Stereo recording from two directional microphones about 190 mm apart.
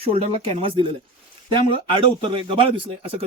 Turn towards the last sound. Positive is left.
turn(degrees=-30)  # may be behind; listen again after turning